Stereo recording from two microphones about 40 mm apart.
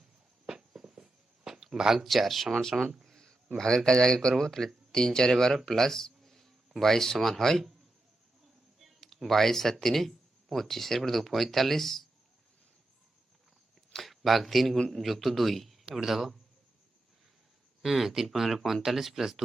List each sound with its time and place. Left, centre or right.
0.4 s writing: centre
2.0 s speech: centre
2.7 s speech: centre
3.8 s speech: centre
4.4 s speech: centre
9.2 s speech: centre
13.9 s speech: centre
17.8 s speech: centre